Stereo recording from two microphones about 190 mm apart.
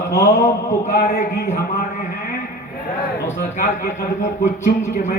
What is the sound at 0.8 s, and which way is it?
Speech, 40° left (ahead or behind).